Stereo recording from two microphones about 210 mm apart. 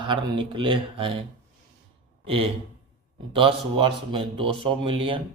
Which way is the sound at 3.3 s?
25° right (ahead or behind).